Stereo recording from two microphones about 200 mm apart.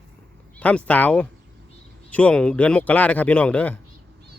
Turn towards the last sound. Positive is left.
turn(degrees=10)  # may be behind; listen again after turning